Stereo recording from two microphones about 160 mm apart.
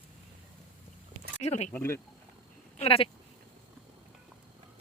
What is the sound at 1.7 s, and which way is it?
Speech, 15° left (ahead or behind).